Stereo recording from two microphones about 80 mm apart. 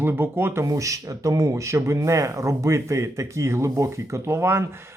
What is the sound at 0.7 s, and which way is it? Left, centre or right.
Speech, right.